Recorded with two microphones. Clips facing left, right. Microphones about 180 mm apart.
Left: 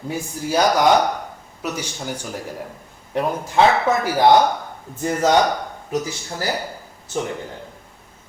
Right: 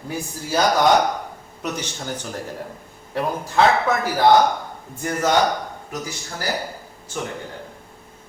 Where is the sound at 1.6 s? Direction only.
10° left (ahead or behind).